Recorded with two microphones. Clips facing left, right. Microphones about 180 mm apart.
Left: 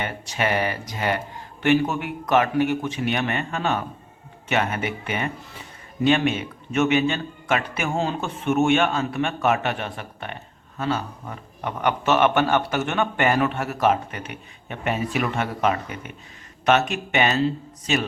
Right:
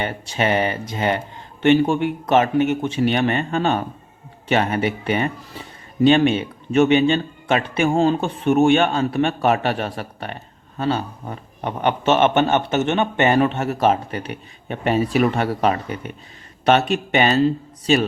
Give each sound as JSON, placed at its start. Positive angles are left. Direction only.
{"t": 0.0, "sound": "a man's voice", "side_deg": -30}